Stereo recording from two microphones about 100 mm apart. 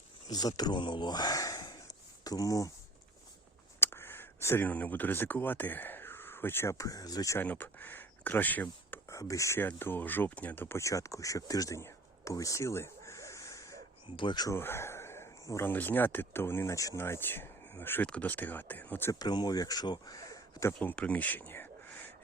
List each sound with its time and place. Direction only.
0.3 s speech: 40° left (ahead or behind)
3.8 s speech: 25° left (ahead or behind); by 7.3 s 40° left (ahead or behind)
7.3 s speech: 20° left (ahead or behind)
9.0 s speech: 30° left (ahead or behind)
14.2 s speech: 55° left (ahead or behind)
14.5 s speech: 25° left (ahead or behind)
19.2 s speech: 40° left (ahead or behind)
20.8 s speech: 15° left (ahead or behind)